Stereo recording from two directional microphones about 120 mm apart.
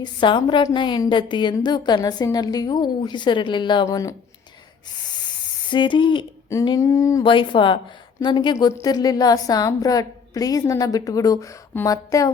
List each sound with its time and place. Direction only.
0.0 s a woman's voice: 40° left (ahead or behind)
5.7 s a woman's voice: 40° left (ahead or behind)
6.7 s a sound: 25° left (ahead or behind)
7.3 s a woman's voice: 45° left (ahead or behind)
8.5 s a woman's voice: 30° left (ahead or behind)
11.9 s a sound: 30° left (ahead or behind)